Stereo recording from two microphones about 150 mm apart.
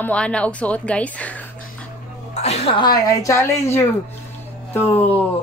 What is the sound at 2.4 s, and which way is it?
Speech, 45° left (ahead or behind).